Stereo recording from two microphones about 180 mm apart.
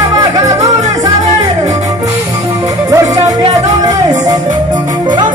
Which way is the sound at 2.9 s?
20° right (ahead or behind).